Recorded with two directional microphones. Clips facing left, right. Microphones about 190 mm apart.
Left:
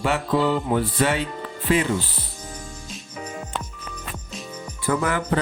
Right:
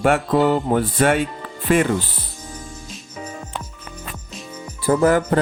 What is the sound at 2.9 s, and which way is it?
Music, 10° right (ahead or behind).